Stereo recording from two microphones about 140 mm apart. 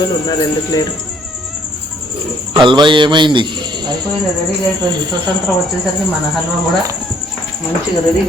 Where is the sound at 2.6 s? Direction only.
35° right (ahead or behind).